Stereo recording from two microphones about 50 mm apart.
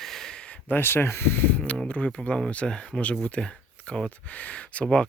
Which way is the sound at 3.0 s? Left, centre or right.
Left.